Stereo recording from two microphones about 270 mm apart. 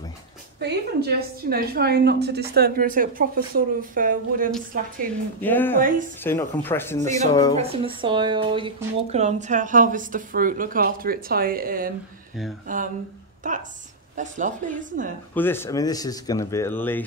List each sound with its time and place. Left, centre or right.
0.6 s a woman's voice: right
5.4 s speech: centre
5.8 s a woman's voice: right
6.2 s speech: centre
7.5 s a woman's voice: right
15.3 s speech: centre